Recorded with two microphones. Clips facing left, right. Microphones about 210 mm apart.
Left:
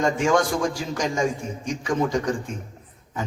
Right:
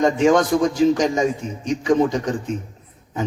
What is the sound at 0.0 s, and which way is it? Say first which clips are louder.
A man's voice: right 5 dB; 20° right (ahead or behind).